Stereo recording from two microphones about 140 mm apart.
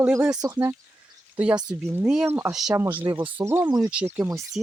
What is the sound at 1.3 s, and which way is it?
Speech, 10° right (ahead or behind).